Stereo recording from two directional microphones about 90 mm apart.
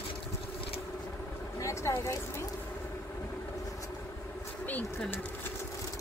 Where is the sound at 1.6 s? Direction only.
35° left (ahead or behind).